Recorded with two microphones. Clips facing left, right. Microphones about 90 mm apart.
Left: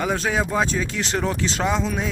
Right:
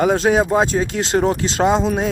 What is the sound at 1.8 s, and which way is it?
Speech, 40° right (ahead or behind).